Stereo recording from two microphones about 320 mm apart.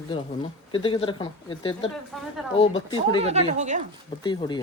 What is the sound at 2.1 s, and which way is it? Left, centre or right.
Speech, centre.